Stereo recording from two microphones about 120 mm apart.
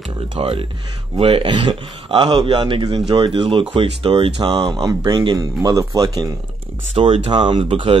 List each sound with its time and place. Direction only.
0.4 s a man's voice: 50° right (ahead or behind)
4.5 s speech: 35° right (ahead or behind)
7.0 s a man's voice: 45° right (ahead or behind)